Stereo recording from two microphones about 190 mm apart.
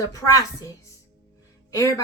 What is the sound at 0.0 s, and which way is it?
Speech, 15° left (ahead or behind).